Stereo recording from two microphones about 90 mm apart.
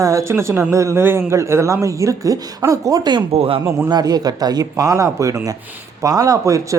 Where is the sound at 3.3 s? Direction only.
90° right.